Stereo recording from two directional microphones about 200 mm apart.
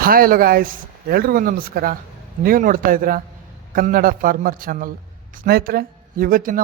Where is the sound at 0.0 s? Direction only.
45° right (ahead or behind).